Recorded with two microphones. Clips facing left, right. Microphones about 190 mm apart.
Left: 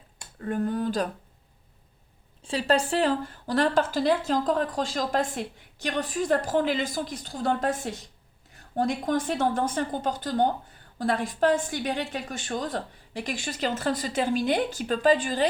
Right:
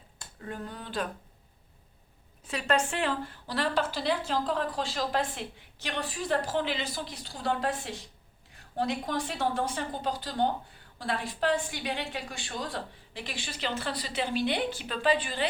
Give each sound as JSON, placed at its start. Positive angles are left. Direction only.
{"t": 0.4, "sound": "a woman's voice", "side_deg": 50}
{"t": 2.4, "sound": "a woman's voice", "side_deg": 30}